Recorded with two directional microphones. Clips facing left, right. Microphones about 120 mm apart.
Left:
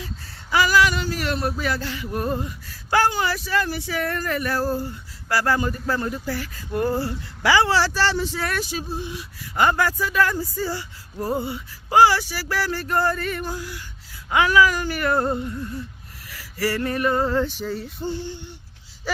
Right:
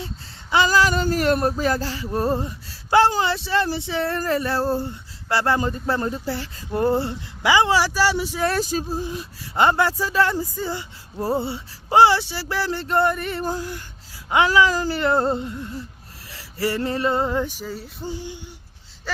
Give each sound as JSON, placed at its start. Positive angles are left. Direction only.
{"t": 0.5, "sound": "speech", "side_deg": -30}
{"t": 2.0, "sound": "a sound", "side_deg": -30}
{"t": 3.1, "sound": "speech", "side_deg": -30}
{"t": 8.4, "sound": "speech", "side_deg": -40}
{"t": 9.6, "sound": "speech", "side_deg": -25}
{"t": 13.4, "sound": "a sound", "side_deg": -40}
{"t": 14.3, "sound": "speech", "side_deg": -25}
{"t": 16.3, "sound": "male singing", "side_deg": -25}
{"t": 19.1, "sound": "gasp", "side_deg": 5}